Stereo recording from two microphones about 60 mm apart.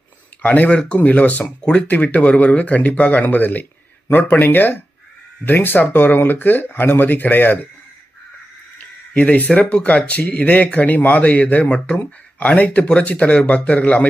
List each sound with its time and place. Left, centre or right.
0.4 s speech: left
9.1 s speech: left